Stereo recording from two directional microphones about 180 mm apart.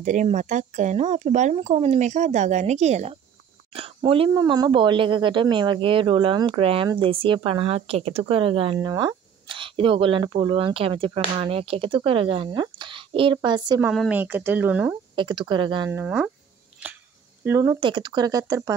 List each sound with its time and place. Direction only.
0.0 s speech: 45° right (ahead or behind); by 13.7 s 25° right (ahead or behind)
13.9 s speech: 5° right (ahead or behind)
15.1 s speech: 25° right (ahead or behind)
15.9 s speech: 10° right (ahead or behind)
17.4 s speech: 15° right (ahead or behind)